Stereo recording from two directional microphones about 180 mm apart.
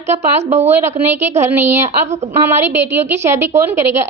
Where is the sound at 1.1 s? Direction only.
15° right (ahead or behind).